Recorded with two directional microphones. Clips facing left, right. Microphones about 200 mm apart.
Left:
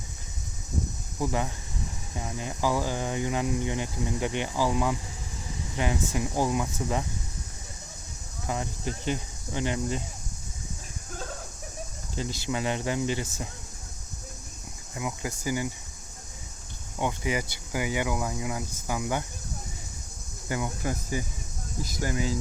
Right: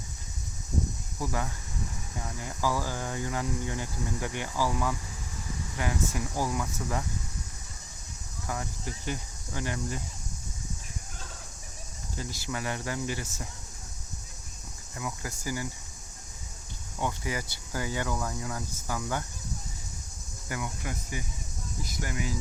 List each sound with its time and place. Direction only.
1.2 s speech: 20° left (ahead or behind)
8.4 s speech: 20° left (ahead or behind)
12.1 s speech: 25° left (ahead or behind)
14.9 s speech: 20° left (ahead or behind)
17.0 s speech: 20° left (ahead or behind)
20.5 s speech: 30° left (ahead or behind)